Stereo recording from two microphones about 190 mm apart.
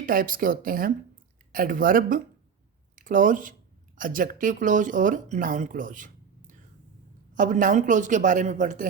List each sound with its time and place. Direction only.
0.0 s speech: 45° right (ahead or behind)
7.3 s a woman's voice: 45° right (ahead or behind)